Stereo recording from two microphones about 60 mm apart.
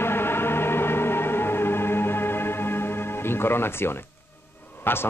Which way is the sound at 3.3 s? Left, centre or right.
Left.